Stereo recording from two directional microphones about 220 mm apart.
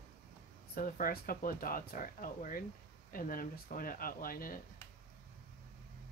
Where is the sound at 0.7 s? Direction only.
40° left (ahead or behind).